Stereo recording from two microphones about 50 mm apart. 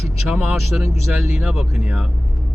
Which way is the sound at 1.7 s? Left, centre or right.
Centre.